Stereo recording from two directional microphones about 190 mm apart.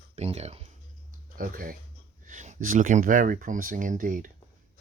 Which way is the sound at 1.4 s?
45° right (ahead or behind).